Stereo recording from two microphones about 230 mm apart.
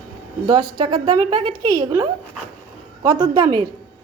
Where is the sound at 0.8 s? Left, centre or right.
Right.